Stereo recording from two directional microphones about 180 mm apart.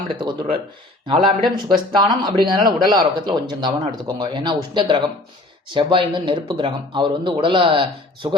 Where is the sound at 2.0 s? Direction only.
25° right (ahead or behind).